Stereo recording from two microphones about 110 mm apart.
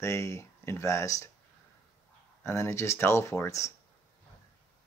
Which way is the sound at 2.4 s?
25° left (ahead or behind).